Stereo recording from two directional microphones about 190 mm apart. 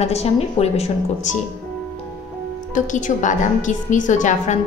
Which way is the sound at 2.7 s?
40° left (ahead or behind).